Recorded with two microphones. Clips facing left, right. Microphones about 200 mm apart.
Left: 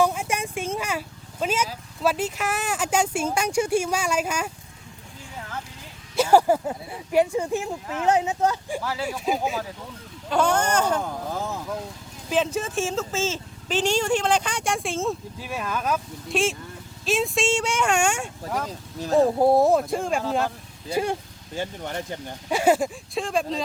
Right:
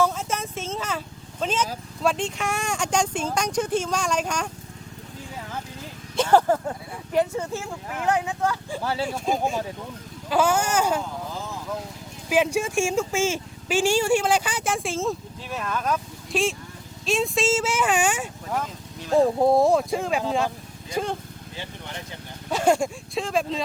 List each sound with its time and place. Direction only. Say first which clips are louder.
0.0 s vehicle: left 1 dB; 15° left (ahead or behind)
2.0 s speech: left 1 dB; 5° left (ahead or behind)
6.1 s speech: left 1 dB; 10° left (ahead or behind)
8.8 s speech: right 3 dB; 30° right (ahead or behind)
9.0 s speech: left 2 dB; 5° left (ahead or behind)
10.2 s speech: even; 5° right (ahead or behind)
12.3 s speech: right 2 dB; 10° right (ahead or behind)
20.9 s speech: left 2 dB; 10° left (ahead or behind)
21.5 s speech: left 8 dB; 45° left (ahead or behind)
22.4 s speech: left 1 dB; 10° left (ahead or behind)